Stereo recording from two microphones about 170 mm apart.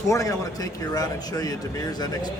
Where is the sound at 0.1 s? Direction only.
20° left (ahead or behind).